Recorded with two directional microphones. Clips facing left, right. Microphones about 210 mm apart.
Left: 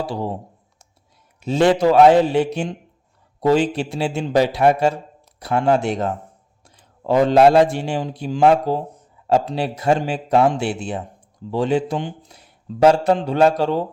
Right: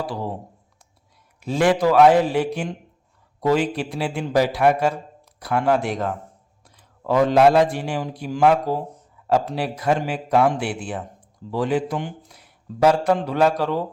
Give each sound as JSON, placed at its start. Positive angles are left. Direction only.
{"t": 0.0, "sound": "a man's voice", "side_deg": 25}
{"t": 1.4, "sound": "a man's voice", "side_deg": 25}